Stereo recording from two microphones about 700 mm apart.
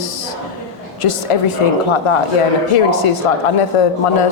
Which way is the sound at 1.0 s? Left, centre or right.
Left.